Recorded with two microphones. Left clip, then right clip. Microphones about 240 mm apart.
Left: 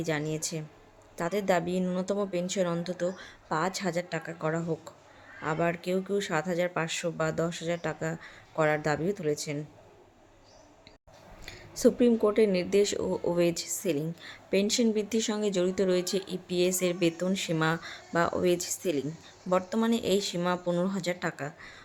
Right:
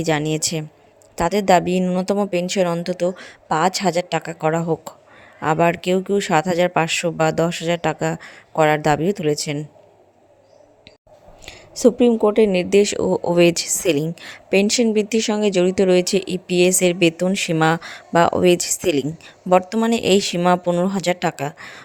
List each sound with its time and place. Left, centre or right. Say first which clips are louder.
0.0 s speech: right 11 dB; right
11.4 s speech: right 9 dB; right